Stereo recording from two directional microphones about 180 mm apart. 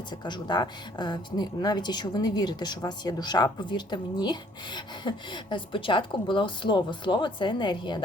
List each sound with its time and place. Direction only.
0.3 s speech: 25° left (ahead or behind)